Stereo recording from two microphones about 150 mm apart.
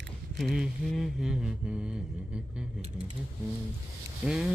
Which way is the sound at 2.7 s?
45° right (ahead or behind).